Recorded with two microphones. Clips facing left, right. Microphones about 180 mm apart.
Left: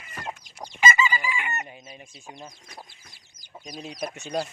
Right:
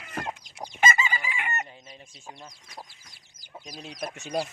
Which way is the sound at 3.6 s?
Centre (ahead or behind).